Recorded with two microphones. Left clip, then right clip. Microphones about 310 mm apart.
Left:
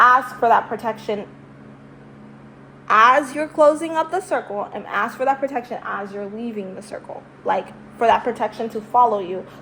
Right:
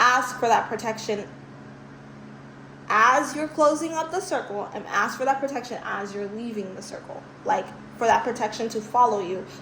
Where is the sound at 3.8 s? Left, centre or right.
Left.